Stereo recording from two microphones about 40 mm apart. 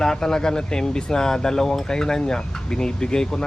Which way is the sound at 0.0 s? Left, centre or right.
Centre.